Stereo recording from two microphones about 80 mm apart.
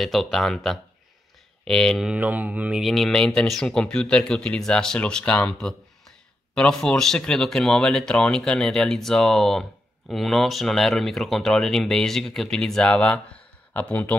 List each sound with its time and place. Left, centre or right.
0.0 s speech: centre
2.0 s speech: centre
2.8 s speech: centre
13.7 s speech: left